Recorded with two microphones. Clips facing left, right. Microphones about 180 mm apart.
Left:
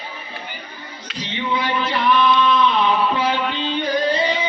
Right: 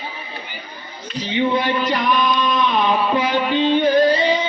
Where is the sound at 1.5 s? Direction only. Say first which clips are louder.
Right 2 dB; 50° right (ahead or behind).